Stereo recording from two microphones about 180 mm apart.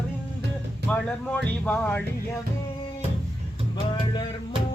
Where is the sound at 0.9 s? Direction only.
10° left (ahead or behind).